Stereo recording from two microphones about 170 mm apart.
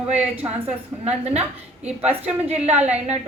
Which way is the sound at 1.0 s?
40° right (ahead or behind).